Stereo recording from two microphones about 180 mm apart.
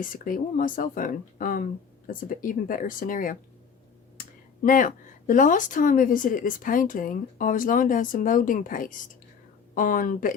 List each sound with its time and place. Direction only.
0.0 s speech: 50° left (ahead or behind)
4.6 s speech: 45° left (ahead or behind)